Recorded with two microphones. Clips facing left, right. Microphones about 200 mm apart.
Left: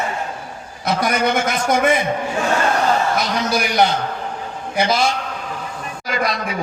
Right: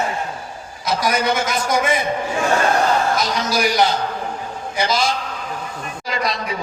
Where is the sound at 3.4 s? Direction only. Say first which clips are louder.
Even; 55° left (ahead or behind).